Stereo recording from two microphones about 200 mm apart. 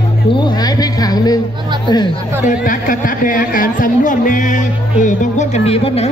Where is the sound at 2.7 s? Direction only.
40° left (ahead or behind).